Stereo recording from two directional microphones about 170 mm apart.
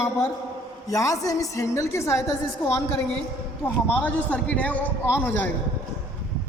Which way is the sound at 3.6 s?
10° left (ahead or behind).